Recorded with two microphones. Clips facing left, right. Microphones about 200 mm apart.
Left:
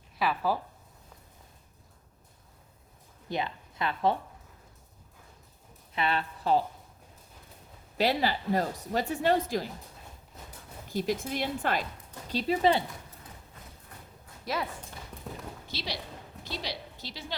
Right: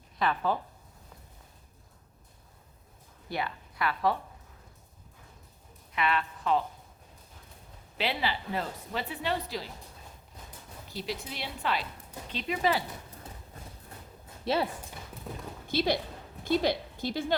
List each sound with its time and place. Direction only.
0.2 s speech: 5° left (ahead or behind)
3.2 s speech: 20° left (ahead or behind)
5.9 s a woman's voice: 30° left (ahead or behind)
7.9 s speech: 40° left (ahead or behind)
10.8 s speech: 45° left (ahead or behind)
12.3 s speech: 35° left (ahead or behind)
14.4 s speech: 30° right (ahead or behind)
15.6 s a woman's voice: 50° right (ahead or behind)